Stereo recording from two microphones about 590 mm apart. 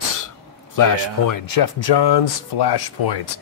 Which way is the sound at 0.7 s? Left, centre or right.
Left.